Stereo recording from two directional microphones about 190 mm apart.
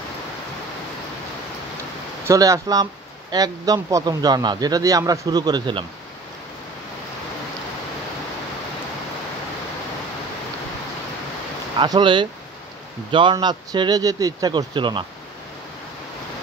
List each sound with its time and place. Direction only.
2.2 s speech: 15° right (ahead or behind)
11.8 s speech: 25° right (ahead or behind)